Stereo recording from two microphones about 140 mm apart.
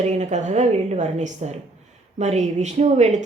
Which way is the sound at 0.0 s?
55° right (ahead or behind).